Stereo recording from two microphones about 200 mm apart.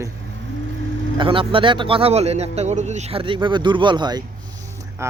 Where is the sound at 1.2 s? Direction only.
25° right (ahead or behind).